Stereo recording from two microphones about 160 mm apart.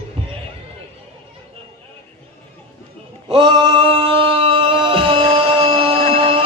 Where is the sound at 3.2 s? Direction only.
30° right (ahead or behind).